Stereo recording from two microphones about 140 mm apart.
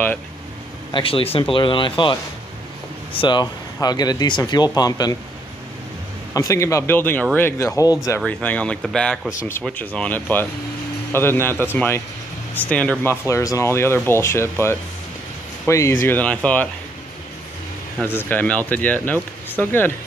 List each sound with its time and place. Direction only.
0.9 s speech: 40° left (ahead or behind)
6.3 s speech: 25° left (ahead or behind)
8.2 s speech: 10° left (ahead or behind)
18.0 s speech: 15° left (ahead or behind)